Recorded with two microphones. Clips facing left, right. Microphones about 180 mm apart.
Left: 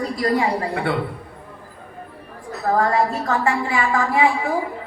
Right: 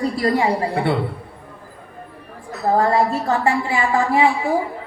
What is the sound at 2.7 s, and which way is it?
A woman's voice, 30° right (ahead or behind).